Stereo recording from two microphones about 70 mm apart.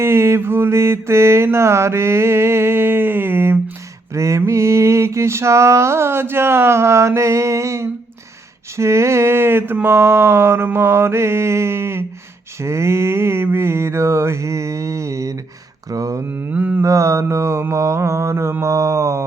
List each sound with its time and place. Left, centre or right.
0.0 s mantra: right
4.1 s mantra: right
15.9 s speech: right
16.5 s mantra: right
16.8 s mantra: right